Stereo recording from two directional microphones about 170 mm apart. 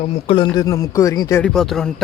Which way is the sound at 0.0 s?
35° left (ahead or behind).